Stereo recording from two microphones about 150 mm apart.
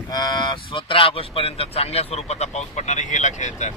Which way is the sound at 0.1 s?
30° left (ahead or behind).